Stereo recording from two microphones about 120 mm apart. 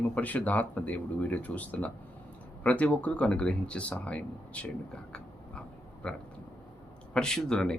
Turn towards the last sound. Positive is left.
turn(degrees=5)  # may be behind; listen again after turning